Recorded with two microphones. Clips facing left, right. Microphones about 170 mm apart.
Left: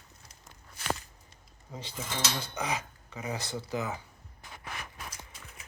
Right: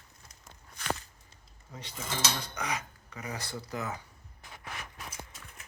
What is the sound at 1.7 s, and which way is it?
Speech, 30° left (ahead or behind).